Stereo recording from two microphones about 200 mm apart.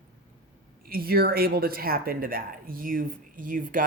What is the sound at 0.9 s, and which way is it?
Speech, 50° right (ahead or behind).